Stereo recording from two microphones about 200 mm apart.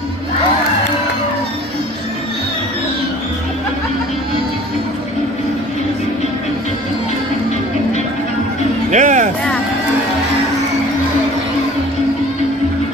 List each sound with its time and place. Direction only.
8.9 s music: 40° right (ahead or behind)